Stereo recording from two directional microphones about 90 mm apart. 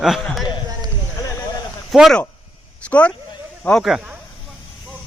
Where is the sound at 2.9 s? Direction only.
15° left (ahead or behind).